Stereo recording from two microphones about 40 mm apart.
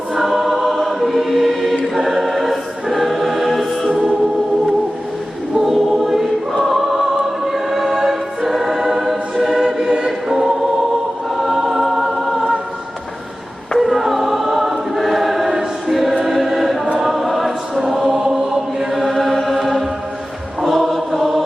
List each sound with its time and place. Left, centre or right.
0.2 s choir: centre
5.5 s choir: centre
9.6 s choir: centre
13.7 s choir: centre
18.9 s chant: centre
20.6 s choir: centre